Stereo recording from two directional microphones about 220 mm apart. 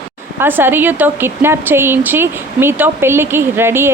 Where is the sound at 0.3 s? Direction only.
10° right (ahead or behind).